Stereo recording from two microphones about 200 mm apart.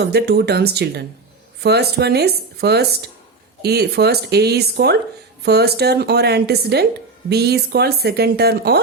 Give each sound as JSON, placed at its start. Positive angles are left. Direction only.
{"t": 0.0, "sound": "speech", "side_deg": -55}